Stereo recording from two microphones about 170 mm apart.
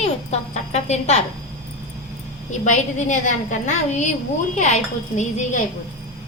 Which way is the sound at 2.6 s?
45° left (ahead or behind).